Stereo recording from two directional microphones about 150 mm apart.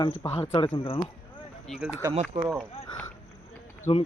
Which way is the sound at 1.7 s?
5° left (ahead or behind).